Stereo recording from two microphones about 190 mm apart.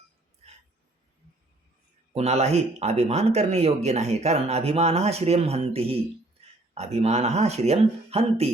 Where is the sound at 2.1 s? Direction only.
35° right (ahead or behind).